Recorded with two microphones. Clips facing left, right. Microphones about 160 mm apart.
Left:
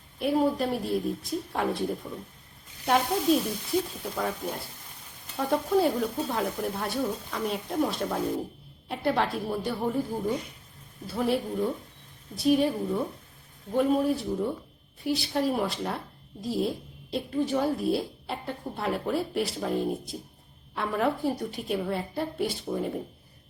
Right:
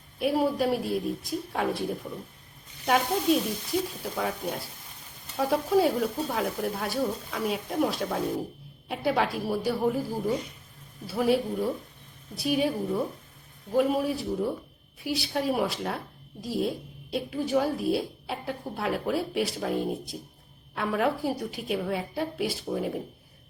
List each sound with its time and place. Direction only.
0.2 s speech: 5° right (ahead or behind)